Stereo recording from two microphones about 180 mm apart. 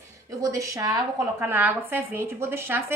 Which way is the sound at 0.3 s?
20° right (ahead or behind).